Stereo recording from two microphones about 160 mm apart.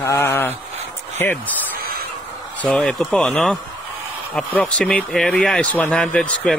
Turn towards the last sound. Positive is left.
turn(degrees=5)  # may be behind; listen again after turning